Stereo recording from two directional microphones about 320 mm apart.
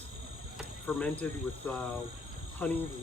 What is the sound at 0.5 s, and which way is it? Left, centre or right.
Cricket, centre.